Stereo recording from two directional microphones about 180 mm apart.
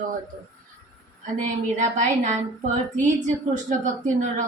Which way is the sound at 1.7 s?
45° right (ahead or behind).